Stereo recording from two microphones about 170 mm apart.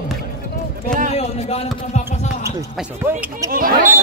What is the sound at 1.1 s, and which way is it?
Speech, 40° left (ahead or behind).